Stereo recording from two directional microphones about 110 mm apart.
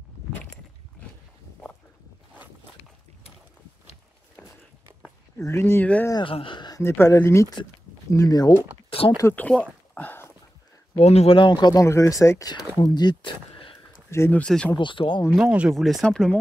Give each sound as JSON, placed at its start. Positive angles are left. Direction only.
{"t": 5.4, "sound": "speech", "side_deg": 25}
{"t": 6.2, "sound": "speech", "side_deg": 50}
{"t": 6.8, "sound": "speech", "side_deg": 25}
{"t": 9.3, "sound": "speech", "side_deg": 15}
{"t": 9.9, "sound": "a sound", "side_deg": 20}
{"t": 11.0, "sound": "speech", "side_deg": 70}
{"t": 11.3, "sound": "speech", "side_deg": 45}
{"t": 11.8, "sound": "speech", "side_deg": 25}
{"t": 14.1, "sound": "speech", "side_deg": 25}
{"t": 14.4, "sound": "speech", "side_deg": 10}
{"t": 14.8, "sound": "speech", "side_deg": 50}
{"t": 15.3, "sound": "speech", "side_deg": -10}
{"t": 15.7, "sound": "speech", "side_deg": 0}